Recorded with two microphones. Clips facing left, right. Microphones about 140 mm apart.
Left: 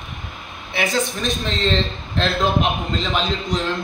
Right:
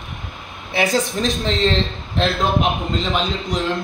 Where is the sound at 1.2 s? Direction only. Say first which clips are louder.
Right 4 dB; 20° right (ahead or behind).